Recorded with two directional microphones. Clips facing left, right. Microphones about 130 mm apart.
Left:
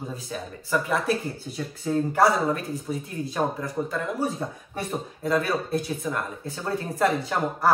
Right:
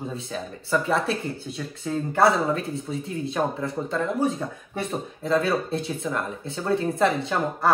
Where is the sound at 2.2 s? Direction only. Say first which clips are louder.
Right 3 dB; 25° right (ahead or behind).